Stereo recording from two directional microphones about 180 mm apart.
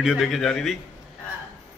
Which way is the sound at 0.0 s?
Centre (ahead or behind).